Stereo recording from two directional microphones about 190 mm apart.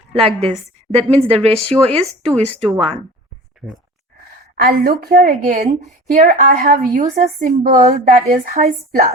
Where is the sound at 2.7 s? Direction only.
30° right (ahead or behind).